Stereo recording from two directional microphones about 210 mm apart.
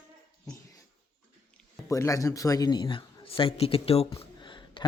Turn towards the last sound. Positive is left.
turn(degrees=20)  # may be behind; listen again after turning